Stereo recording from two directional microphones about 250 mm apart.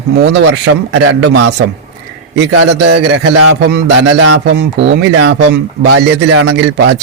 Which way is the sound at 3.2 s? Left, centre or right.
Right.